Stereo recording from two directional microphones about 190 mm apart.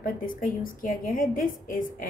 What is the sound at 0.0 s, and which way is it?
A woman's voice, 45° left (ahead or behind).